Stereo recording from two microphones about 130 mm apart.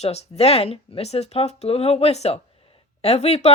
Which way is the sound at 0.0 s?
55° left (ahead or behind).